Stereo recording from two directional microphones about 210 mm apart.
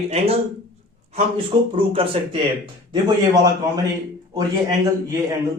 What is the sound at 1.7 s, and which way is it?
Speech, 25° right (ahead or behind).